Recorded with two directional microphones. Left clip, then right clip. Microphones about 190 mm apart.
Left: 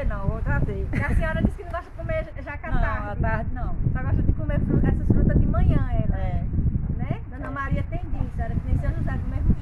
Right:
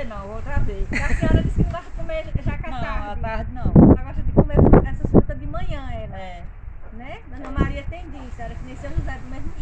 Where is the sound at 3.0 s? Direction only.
15° left (ahead or behind).